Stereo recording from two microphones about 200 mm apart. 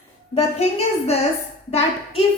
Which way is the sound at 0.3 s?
30° left (ahead or behind).